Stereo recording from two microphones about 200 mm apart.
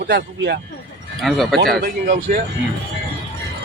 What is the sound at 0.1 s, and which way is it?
Speech, 55° right (ahead or behind).